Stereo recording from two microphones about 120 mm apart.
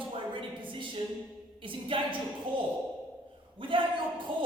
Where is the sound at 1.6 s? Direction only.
45° right (ahead or behind).